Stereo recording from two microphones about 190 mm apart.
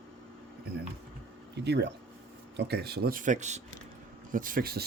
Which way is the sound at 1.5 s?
65° right (ahead or behind).